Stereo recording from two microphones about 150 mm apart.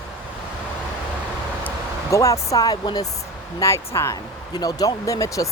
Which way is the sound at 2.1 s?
20° left (ahead or behind).